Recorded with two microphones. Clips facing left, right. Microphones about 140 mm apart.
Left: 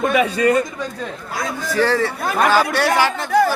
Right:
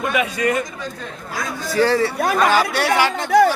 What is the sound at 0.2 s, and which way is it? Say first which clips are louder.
Speech: left 4 dB; 35° left (ahead or behind).